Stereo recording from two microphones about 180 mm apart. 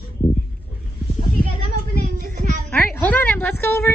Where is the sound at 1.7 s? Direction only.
45° right (ahead or behind).